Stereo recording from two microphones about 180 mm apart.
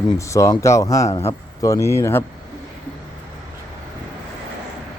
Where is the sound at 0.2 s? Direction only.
15° left (ahead or behind).